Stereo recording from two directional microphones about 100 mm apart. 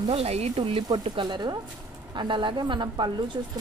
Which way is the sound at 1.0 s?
50° right (ahead or behind).